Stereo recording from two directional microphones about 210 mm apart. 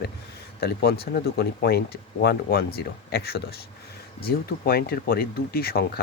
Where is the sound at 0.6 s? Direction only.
50° left (ahead or behind).